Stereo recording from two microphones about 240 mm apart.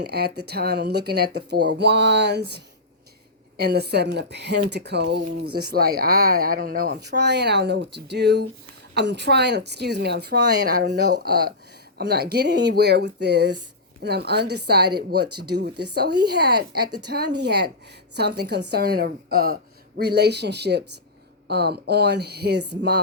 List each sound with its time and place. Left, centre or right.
0.0 s speech: right
3.6 s speech: right